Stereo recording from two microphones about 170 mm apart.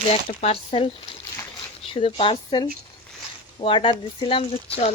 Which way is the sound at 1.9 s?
30° left (ahead or behind).